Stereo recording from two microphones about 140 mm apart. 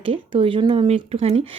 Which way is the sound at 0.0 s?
40° right (ahead or behind).